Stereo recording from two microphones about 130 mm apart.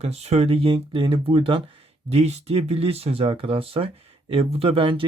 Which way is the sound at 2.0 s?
55° right (ahead or behind).